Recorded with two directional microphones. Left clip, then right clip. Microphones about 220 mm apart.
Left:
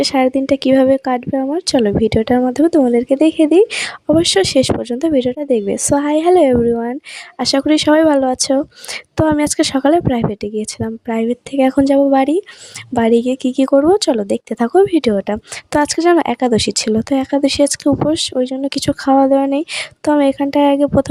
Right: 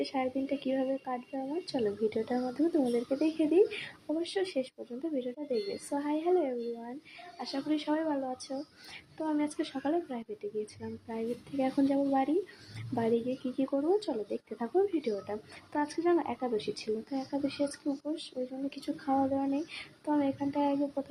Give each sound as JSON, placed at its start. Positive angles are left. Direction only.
{"t": 0.0, "sound": "speech", "side_deg": 50}